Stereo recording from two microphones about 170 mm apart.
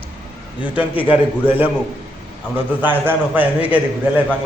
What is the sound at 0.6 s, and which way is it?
Speech, 10° right (ahead or behind).